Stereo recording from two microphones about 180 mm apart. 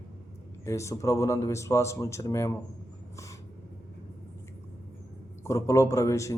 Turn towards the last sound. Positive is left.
turn(degrees=15)  # may be behind; listen again after turning